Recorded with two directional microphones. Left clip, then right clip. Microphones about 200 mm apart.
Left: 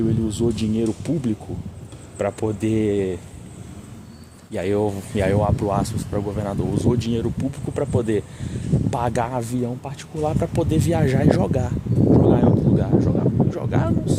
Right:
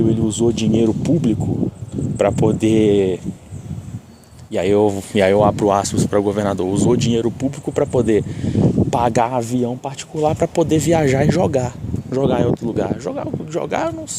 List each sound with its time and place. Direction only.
0.1 s speech: 25° right (ahead or behind)
4.5 s speech: 30° right (ahead or behind)